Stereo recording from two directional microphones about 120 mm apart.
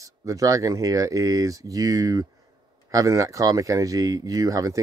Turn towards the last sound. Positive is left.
turn(degrees=-25)  # may be behind; listen again after turning